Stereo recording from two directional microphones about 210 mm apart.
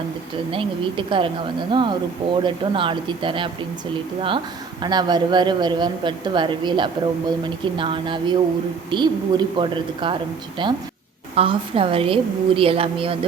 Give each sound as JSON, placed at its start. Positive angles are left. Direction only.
{"t": 0.5, "sound": "a man's voice", "side_deg": -25}
{"t": 4.8, "sound": "a man's voice", "side_deg": -20}